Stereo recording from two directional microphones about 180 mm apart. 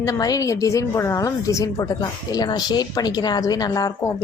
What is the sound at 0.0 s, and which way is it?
A woman's voice, 20° left (ahead or behind).